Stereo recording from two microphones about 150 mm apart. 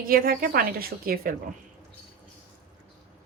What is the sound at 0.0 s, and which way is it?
A woman's voice, 75° right (ahead or behind).